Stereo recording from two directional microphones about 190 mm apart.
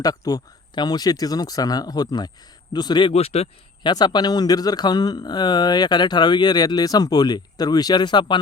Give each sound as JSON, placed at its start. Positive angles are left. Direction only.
{"t": 0.0, "sound": "speech", "side_deg": 20}
{"t": 3.9, "sound": "speech", "side_deg": 20}